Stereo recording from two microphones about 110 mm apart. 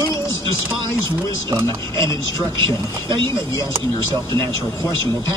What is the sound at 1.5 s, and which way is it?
Speech, 40° right (ahead or behind).